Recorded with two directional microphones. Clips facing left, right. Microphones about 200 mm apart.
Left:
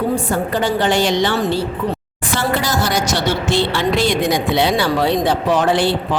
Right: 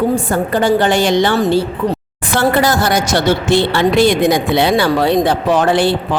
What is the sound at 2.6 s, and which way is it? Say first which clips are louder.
A woman's voice: right 5 dB; 55° right (ahead or behind).